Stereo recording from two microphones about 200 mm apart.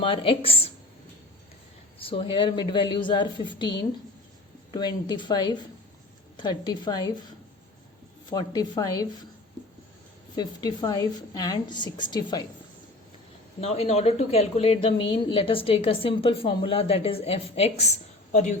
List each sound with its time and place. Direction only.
0.0 s speech: 25° left (ahead or behind)
2.0 s speech: 25° left (ahead or behind)
10.3 s speech: 20° left (ahead or behind)
13.6 s speech: 30° left (ahead or behind)